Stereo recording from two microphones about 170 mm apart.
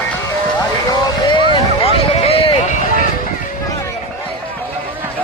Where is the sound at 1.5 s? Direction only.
35° left (ahead or behind).